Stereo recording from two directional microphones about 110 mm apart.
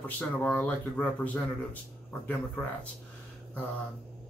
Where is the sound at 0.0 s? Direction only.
15° left (ahead or behind).